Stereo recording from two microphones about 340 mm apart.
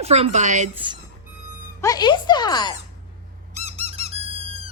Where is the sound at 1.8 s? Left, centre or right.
Centre.